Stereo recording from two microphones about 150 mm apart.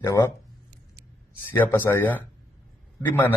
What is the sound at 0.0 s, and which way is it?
Speech, 20° left (ahead or behind).